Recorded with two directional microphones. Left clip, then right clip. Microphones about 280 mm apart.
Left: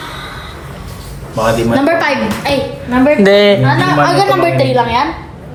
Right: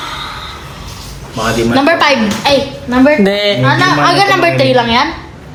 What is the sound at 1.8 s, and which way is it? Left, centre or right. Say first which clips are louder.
Speech: right 3 dB; right.